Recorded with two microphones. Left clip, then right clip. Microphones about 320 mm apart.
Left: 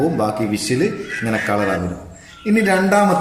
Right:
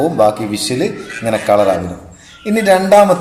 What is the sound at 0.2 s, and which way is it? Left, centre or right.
A man's voice, centre.